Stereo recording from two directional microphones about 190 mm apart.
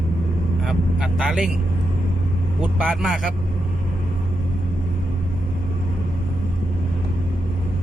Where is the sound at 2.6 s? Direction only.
5° right (ahead or behind).